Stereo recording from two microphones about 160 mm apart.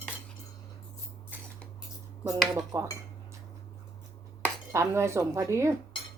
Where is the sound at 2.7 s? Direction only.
20° right (ahead or behind).